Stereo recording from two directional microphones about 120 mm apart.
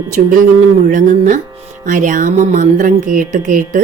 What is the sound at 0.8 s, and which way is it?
Speech, 90° right.